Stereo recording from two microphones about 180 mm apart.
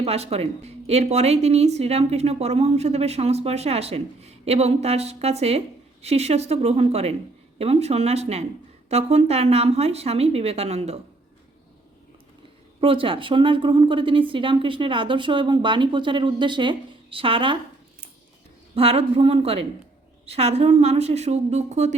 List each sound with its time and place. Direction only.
0.0 s speech: 35° right (ahead or behind)
12.8 s a woman's voice: 30° right (ahead or behind)
18.7 s speech: 35° right (ahead or behind)